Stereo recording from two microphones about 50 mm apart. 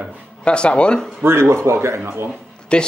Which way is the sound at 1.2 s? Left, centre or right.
Right.